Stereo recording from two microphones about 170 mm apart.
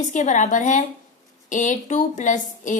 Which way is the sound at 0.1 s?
45° left (ahead or behind).